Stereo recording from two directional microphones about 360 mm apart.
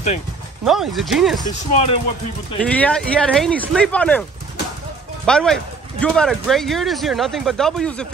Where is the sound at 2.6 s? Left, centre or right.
Centre.